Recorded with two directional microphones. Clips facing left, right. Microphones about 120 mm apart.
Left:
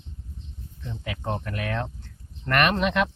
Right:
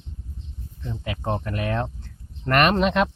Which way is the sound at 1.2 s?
30° right (ahead or behind).